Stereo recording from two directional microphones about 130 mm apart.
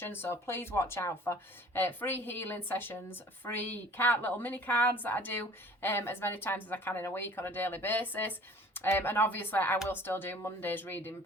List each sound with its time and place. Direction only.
0.0 s speech: 15° left (ahead or behind)